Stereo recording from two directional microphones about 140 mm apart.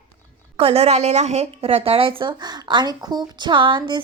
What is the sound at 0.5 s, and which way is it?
A woman's voice, 45° right (ahead or behind).